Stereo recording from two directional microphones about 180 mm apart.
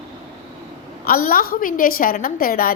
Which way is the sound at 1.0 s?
55° left (ahead or behind).